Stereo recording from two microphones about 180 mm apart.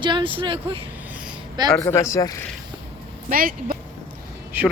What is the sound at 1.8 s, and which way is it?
Speech, 15° left (ahead or behind).